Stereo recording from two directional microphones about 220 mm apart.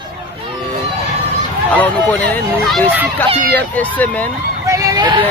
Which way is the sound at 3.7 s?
5° left (ahead or behind).